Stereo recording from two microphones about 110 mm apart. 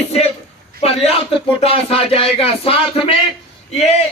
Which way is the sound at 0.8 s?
65° left (ahead or behind).